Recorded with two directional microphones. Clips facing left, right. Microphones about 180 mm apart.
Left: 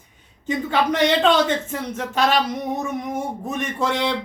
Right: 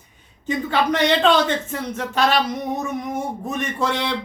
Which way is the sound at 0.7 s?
15° left (ahead or behind).